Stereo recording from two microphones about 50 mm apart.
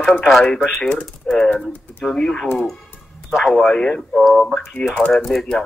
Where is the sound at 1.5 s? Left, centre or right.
Left.